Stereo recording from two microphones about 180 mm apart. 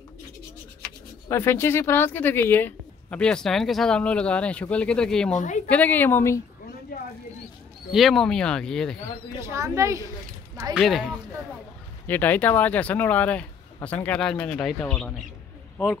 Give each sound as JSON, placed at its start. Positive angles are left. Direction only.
{"t": 0.8, "sound": "speech", "side_deg": 15}
{"t": 5.3, "sound": "a woman's voice", "side_deg": 45}
{"t": 5.7, "sound": "speech", "side_deg": 10}
{"t": 7.9, "sound": "speech", "side_deg": 0}
{"t": 9.5, "sound": "speech", "side_deg": -15}
{"t": 10.7, "sound": "speech", "side_deg": 0}